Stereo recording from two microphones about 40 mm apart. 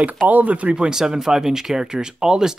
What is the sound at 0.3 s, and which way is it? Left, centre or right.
Speech, right.